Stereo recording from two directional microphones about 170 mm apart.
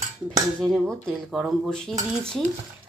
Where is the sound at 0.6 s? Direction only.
5° left (ahead or behind).